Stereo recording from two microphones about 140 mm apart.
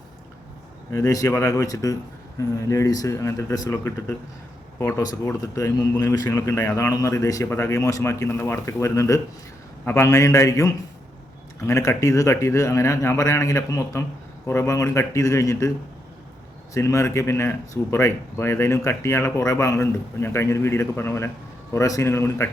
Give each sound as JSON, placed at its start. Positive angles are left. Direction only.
{"t": 0.9, "sound": "speech", "side_deg": 25}
{"t": 16.7, "sound": "speech", "side_deg": 20}